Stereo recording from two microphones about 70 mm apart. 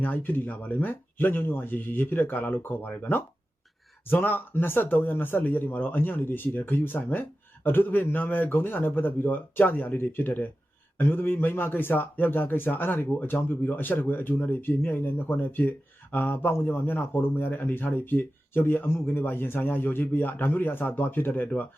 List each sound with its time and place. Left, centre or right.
0.0 s a man's voice: left